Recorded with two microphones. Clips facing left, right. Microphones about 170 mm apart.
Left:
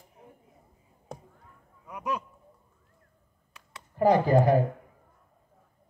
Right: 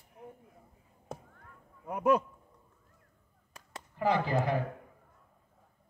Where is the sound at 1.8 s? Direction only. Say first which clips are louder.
Right 7 dB; 55° right (ahead or behind).